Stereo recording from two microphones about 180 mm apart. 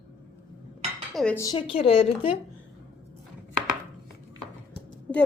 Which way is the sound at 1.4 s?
25° left (ahead or behind).